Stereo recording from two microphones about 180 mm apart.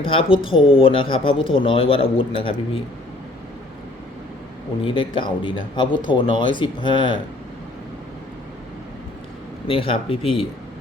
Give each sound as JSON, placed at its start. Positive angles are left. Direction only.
{"t": 0.1, "sound": "speech", "side_deg": 30}
{"t": 4.8, "sound": "speech", "side_deg": 30}
{"t": 9.6, "sound": "speech", "side_deg": 30}